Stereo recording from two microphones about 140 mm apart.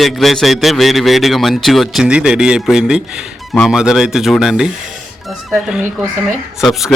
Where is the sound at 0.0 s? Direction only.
Centre (ahead or behind).